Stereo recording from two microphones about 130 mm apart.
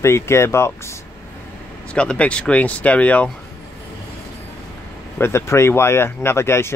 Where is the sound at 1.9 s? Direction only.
10° left (ahead or behind).